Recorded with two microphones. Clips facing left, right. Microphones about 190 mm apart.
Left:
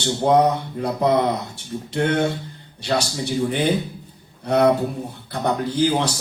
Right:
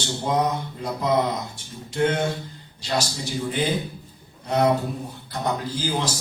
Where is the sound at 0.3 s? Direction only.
65° left (ahead or behind).